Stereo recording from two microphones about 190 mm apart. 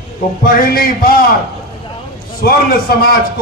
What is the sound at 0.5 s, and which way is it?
Speech, 50° left (ahead or behind).